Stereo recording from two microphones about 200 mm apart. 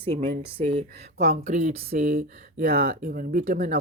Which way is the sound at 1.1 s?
55° right (ahead or behind).